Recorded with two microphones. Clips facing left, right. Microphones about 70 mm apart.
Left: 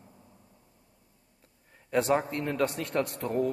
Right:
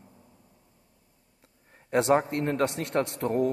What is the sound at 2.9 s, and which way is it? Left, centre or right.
Speech, right.